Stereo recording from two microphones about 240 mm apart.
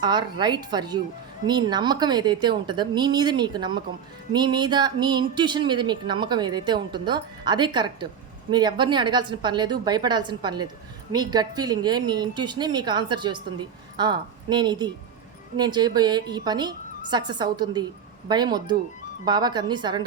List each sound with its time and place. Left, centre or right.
0.0 s a woman's voice: centre